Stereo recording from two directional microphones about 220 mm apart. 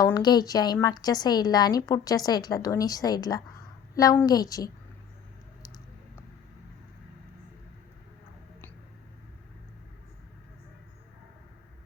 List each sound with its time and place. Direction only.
0.0 s a woman's voice: 20° left (ahead or behind)